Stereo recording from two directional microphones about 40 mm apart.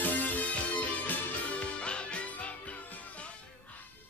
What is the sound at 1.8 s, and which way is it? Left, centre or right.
Music, left.